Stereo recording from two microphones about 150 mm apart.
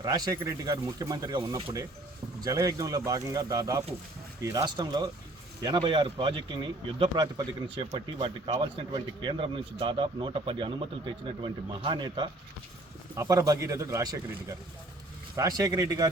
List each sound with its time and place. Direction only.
0.0 s speech: 25° right (ahead or behind)
15.4 s speech: 25° right (ahead or behind)